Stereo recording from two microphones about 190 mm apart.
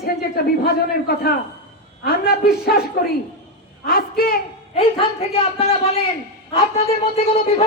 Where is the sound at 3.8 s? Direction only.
50° left (ahead or behind).